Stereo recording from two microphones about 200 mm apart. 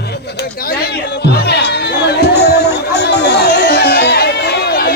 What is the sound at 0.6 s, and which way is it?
Music, 50° left (ahead or behind).